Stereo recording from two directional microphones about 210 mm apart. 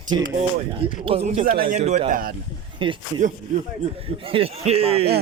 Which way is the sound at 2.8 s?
25° right (ahead or behind).